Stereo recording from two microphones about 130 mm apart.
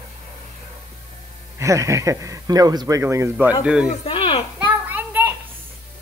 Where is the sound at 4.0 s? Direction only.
45° left (ahead or behind).